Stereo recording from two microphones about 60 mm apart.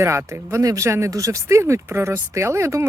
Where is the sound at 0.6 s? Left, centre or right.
Right.